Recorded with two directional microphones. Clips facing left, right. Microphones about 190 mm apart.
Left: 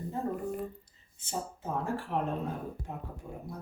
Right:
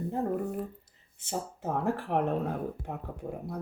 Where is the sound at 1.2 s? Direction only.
65° right (ahead or behind).